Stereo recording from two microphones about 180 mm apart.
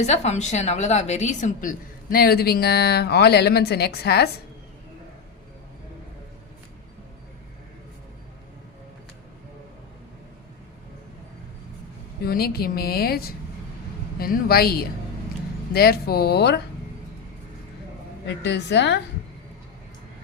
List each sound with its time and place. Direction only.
0.0 s a woman's voice: 40° left (ahead or behind); by 4.3 s 60° left (ahead or behind)
12.2 s a woman's voice: 60° left (ahead or behind)
18.4 s a woman's voice: 75° left (ahead or behind)